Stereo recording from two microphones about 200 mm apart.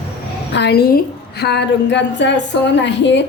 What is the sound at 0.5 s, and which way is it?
A woman's voice, 55° left (ahead or behind).